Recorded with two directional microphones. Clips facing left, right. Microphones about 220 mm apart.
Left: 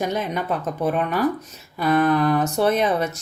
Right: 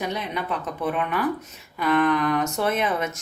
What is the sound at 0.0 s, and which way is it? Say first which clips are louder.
Speech: left 4 dB; 45° left (ahead or behind).